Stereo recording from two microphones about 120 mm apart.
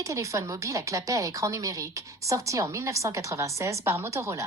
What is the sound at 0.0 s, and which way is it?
Speech, 25° right (ahead or behind).